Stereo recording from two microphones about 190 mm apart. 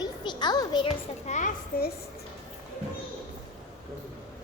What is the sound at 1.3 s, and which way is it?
Speech, 40° left (ahead or behind).